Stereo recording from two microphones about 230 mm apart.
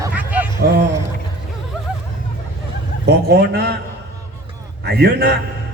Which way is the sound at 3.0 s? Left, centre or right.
Right.